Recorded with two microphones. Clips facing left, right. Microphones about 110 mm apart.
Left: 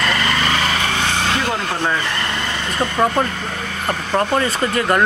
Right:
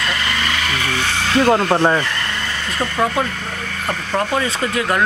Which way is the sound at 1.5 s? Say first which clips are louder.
Right 7 dB; 40° right (ahead or behind).